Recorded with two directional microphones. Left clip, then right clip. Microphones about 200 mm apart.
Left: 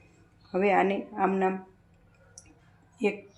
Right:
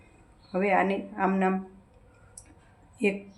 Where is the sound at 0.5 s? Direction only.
15° left (ahead or behind).